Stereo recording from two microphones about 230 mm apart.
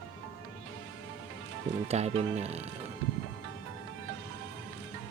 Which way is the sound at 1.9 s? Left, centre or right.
Right.